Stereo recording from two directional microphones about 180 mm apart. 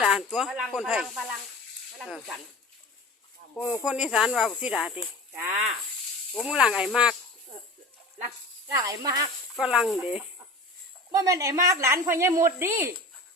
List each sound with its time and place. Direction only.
0.0 s speech: 5° right (ahead or behind)
3.5 s speech: 15° left (ahead or behind)
3.8 s speech: 5° right (ahead or behind)
8.6 s speech: 20° right (ahead or behind)
9.6 s speech: 5° right (ahead or behind)
11.1 s speech: 20° right (ahead or behind)